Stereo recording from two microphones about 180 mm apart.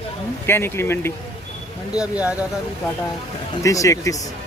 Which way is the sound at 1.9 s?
5° right (ahead or behind).